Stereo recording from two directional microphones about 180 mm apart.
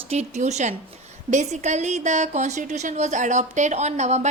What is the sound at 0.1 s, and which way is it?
A woman's voice, 40° right (ahead or behind).